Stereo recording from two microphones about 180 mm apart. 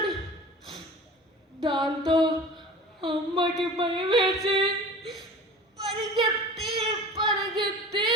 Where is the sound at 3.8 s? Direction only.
25° right (ahead or behind).